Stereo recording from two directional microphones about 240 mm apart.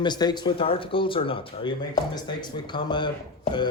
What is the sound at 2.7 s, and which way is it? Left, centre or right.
Speech, centre.